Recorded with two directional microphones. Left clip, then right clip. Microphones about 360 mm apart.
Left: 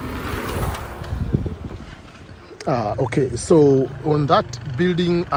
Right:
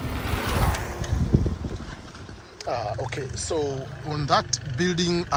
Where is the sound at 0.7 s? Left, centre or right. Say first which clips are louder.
Even; right.